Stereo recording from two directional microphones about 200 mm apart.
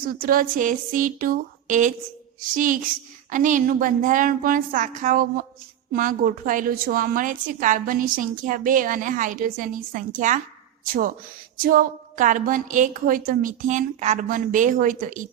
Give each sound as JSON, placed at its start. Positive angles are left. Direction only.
{"t": 0.0, "sound": "a woman's voice", "side_deg": -45}
{"t": 3.2, "sound": "a woman's voice", "side_deg": -40}
{"t": 11.5, "sound": "a woman's voice", "side_deg": -45}